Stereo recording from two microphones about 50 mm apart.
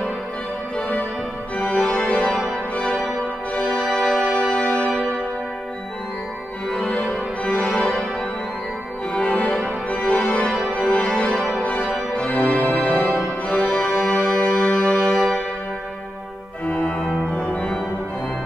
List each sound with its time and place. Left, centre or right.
0.7 s music: left
1.6 s organ: left
2.7 s music: left
3.6 s music: centre
4.4 s music: left
7.0 s music: left
9.1 s music: left
13.5 s organ: left
16.6 s organ: left